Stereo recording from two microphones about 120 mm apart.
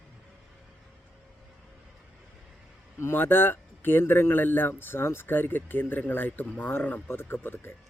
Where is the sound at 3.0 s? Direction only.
20° left (ahead or behind).